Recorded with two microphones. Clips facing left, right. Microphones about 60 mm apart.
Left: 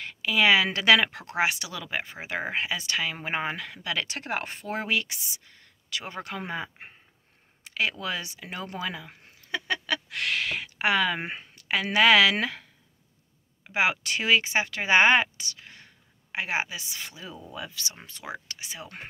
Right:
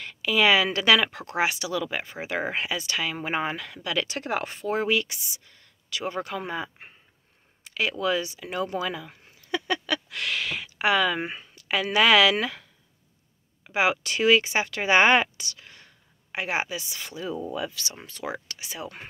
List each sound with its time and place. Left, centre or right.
0.0 s a woman's voice: centre
7.6 s a sound: left
8.0 s speech: left
11.1 s speech: left
11.6 s speech: left
13.7 s speech: centre
14.8 s speech: centre